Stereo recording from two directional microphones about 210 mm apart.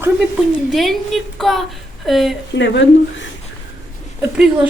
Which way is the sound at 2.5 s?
55° left (ahead or behind).